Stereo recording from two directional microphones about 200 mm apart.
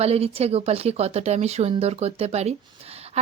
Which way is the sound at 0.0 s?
30° right (ahead or behind).